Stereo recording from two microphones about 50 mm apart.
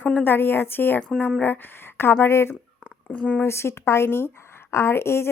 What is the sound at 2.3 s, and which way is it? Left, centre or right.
Speech, left.